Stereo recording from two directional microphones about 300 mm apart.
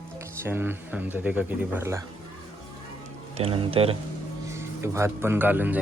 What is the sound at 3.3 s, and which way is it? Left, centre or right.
A man's voice, centre.